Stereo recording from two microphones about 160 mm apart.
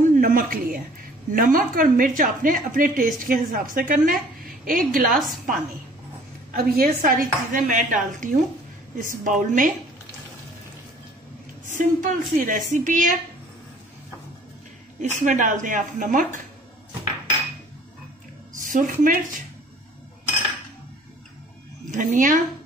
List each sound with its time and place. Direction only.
0.0 s a sound: 60° right (ahead or behind)
1.3 s a woman's voice: 60° right (ahead or behind)
6.5 s a woman's voice: 70° right (ahead or behind); by 9.7 s 55° right (ahead or behind)
11.6 s a woman's voice: 55° right (ahead or behind)
15.0 s a woman's voice: 50° right (ahead or behind)
18.5 s a woman's voice: 55° right (ahead or behind)
21.9 s a woman's voice: 55° right (ahead or behind)